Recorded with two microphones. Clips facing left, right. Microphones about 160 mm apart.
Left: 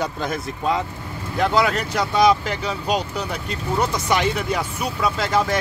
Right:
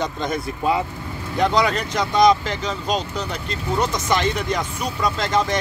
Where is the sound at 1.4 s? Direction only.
5° left (ahead or behind).